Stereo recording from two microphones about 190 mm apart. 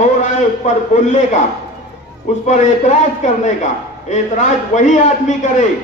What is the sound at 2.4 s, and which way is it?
A man's voice, 40° left (ahead or behind).